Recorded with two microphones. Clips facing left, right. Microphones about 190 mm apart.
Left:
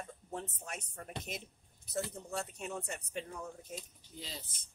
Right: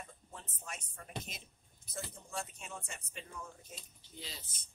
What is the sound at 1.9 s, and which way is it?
Speech, 65° left (ahead or behind).